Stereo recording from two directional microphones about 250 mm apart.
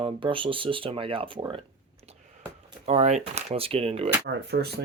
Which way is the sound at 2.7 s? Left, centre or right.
Right.